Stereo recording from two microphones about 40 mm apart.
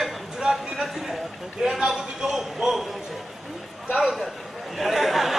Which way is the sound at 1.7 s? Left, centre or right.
Centre.